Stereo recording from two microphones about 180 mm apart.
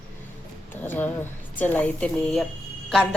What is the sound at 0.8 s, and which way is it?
A woman's voice, 10° left (ahead or behind).